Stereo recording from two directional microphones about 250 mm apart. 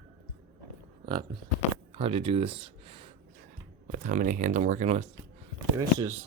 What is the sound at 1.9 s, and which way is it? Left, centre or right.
Speech, right.